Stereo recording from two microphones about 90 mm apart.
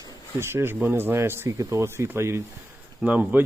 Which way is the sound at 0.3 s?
25° right (ahead or behind).